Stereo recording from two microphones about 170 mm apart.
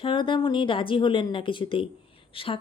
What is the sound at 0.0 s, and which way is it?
A woman's voice, 30° left (ahead or behind).